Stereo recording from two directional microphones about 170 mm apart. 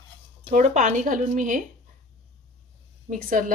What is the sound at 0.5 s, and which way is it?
A woman's voice, 45° right (ahead or behind).